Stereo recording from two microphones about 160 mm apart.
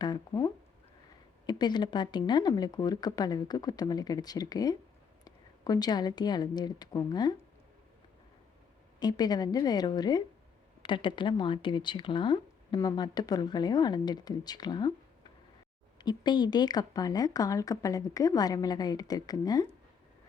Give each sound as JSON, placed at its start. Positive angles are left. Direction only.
{"t": 0.0, "sound": "speech", "side_deg": 25}
{"t": 9.0, "sound": "speech", "side_deg": 25}
{"t": 16.0, "sound": "speech", "side_deg": 25}